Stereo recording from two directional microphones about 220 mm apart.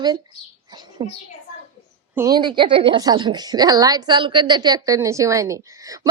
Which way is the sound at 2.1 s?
15° right (ahead or behind).